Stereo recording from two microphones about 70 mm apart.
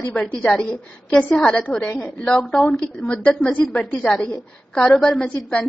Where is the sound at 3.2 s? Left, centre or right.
Left.